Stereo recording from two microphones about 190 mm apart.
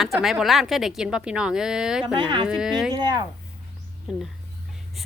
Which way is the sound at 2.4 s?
5° right (ahead or behind).